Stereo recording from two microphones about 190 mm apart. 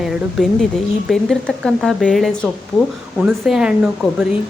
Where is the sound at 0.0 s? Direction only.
Centre (ahead or behind).